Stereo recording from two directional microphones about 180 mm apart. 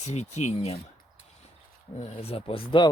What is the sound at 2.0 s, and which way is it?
Speech, 35° left (ahead or behind).